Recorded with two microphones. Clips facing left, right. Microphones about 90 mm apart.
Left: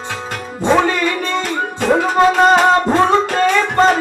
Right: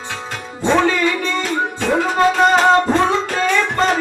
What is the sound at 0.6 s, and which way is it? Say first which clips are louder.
Music: left 1 dB; 10° left (ahead or behind).